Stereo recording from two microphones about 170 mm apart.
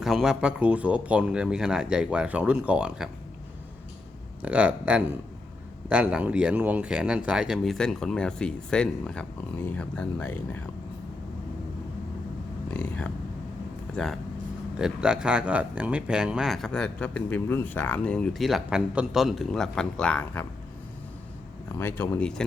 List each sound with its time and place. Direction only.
0.0 s speech: 5° right (ahead or behind)
4.4 s speech: 5° right (ahead or behind); by 10.6 s 10° left (ahead or behind)
12.7 s speech: 10° left (ahead or behind)
21.8 s speech: 15° left (ahead or behind)